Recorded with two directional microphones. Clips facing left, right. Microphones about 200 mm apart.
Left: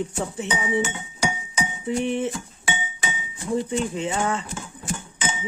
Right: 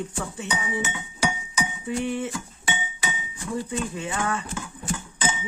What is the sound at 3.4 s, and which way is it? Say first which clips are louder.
Speech: left 5 dB; 20° left (ahead or behind).